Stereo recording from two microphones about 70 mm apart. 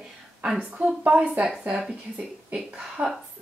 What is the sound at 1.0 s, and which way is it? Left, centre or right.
A woman's voice, right.